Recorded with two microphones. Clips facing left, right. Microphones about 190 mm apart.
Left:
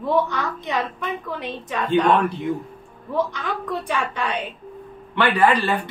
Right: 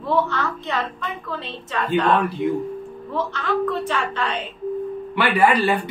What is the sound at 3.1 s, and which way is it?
A woman's voice, 15° left (ahead or behind).